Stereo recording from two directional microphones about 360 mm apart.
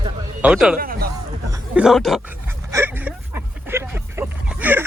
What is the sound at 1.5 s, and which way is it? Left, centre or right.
Dog, centre.